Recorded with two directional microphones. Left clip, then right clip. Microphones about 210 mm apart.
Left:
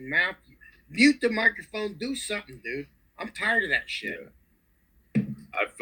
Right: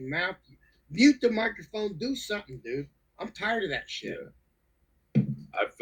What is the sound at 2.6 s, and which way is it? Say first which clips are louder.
Speech: left 1 dB; 15° right (ahead or behind).